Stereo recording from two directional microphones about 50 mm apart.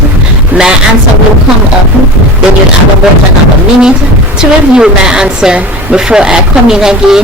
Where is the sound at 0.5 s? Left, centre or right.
Right.